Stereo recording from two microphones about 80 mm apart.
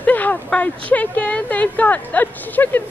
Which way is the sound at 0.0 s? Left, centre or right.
Left.